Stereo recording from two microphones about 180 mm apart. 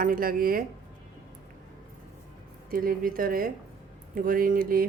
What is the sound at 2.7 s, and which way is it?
Speech, 50° right (ahead or behind).